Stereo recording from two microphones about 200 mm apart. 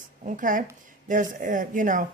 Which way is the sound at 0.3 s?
40° right (ahead or behind).